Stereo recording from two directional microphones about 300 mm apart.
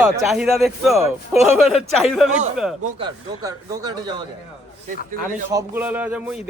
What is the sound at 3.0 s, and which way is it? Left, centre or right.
Speech, centre.